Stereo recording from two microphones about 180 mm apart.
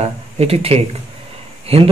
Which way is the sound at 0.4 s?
35° right (ahead or behind).